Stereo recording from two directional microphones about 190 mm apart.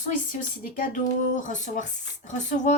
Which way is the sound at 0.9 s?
40° left (ahead or behind).